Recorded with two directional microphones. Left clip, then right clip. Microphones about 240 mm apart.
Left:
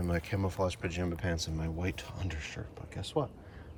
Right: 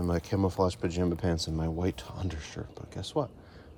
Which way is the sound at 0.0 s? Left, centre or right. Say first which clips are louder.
Right 5 dB; centre.